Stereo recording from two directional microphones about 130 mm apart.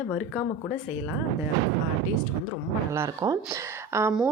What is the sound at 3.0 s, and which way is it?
A woman's voice, 25° right (ahead or behind).